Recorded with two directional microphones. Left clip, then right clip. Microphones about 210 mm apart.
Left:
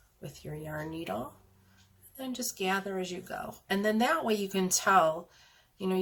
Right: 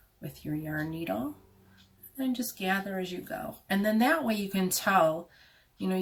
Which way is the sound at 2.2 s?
40° left (ahead or behind).